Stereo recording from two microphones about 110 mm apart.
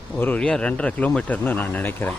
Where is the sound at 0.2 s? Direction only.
15° left (ahead or behind).